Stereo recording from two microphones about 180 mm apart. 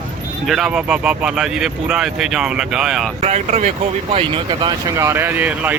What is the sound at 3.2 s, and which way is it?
Speech, 40° right (ahead or behind).